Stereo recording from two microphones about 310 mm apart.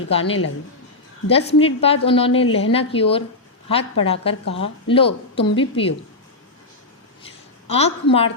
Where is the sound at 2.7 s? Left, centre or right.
Centre.